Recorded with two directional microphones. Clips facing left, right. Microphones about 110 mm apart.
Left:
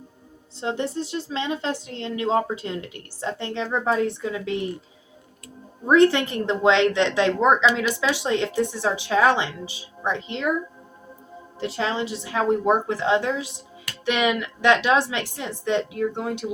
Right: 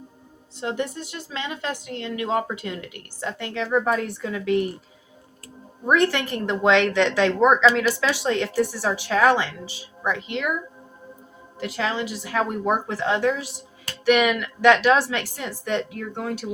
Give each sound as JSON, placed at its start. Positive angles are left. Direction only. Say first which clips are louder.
{"t": 0.6, "sound": "a woman's voice", "louder": "left 1 dB", "side_deg": 25}
{"t": 5.9, "sound": "a woman's voice", "louder": "left 4 dB", "side_deg": 20}
{"t": 11.6, "sound": "a woman's voice", "louder": "left 1 dB", "side_deg": 30}